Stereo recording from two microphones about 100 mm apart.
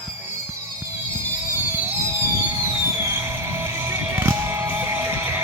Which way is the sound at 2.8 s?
25° right (ahead or behind).